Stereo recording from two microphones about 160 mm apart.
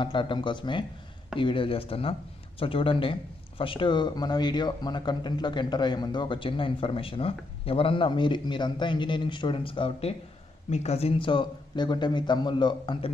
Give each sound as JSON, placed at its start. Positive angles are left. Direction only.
{"t": 0.0, "sound": "a man's voice", "side_deg": 30}